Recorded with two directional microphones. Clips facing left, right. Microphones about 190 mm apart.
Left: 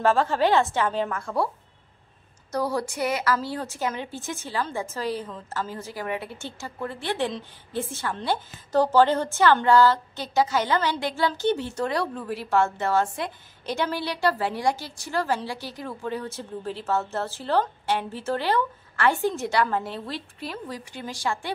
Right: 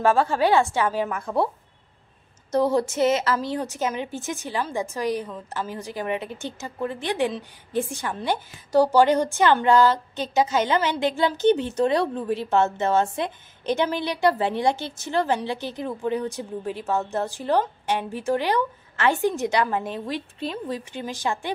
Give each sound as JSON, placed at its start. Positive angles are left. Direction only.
{"t": 0.0, "sound": "a woman's voice", "side_deg": -15}
{"t": 2.5, "sound": "a woman's voice", "side_deg": -25}